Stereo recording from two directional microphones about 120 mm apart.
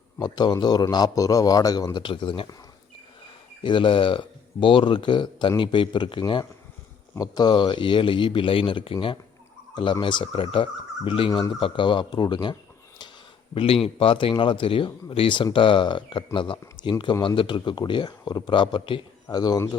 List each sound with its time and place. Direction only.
0.2 s speech: 35° left (ahead or behind)
3.6 s speech: 45° left (ahead or behind)
13.5 s speech: 50° left (ahead or behind); by 19.7 s 35° left (ahead or behind)